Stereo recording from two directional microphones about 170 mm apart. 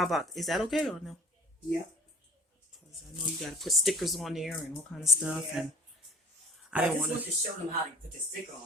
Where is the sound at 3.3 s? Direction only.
Centre (ahead or behind).